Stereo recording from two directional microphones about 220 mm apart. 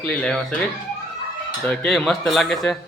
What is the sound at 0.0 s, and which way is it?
Speech, 5° left (ahead or behind).